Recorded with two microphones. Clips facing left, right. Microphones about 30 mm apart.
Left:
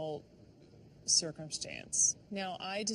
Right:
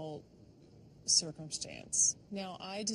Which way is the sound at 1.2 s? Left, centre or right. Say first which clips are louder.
Left 2 dB; left.